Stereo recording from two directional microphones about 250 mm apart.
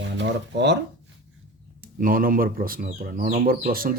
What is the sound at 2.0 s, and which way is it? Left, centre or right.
Speech, right.